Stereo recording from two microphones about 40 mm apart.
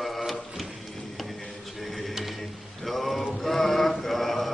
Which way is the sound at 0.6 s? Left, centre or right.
Centre.